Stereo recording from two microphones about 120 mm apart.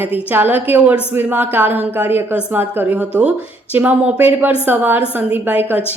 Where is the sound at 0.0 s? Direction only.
15° right (ahead or behind).